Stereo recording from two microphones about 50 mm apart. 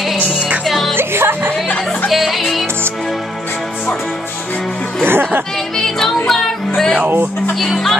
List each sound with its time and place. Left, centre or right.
0.7 s music: centre
0.9 s music: right
2.0 s music: centre
5.0 s speech: right
5.9 s music: centre
7.5 s speech: centre